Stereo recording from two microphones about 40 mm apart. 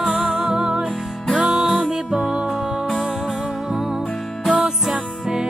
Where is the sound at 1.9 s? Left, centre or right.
Centre.